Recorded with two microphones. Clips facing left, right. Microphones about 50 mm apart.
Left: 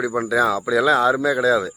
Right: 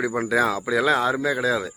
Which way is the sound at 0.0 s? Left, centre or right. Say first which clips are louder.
Left 2 dB; right.